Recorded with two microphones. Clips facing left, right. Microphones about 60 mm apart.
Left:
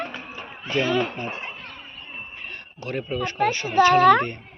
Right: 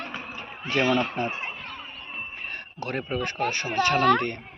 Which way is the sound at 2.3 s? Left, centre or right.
Right.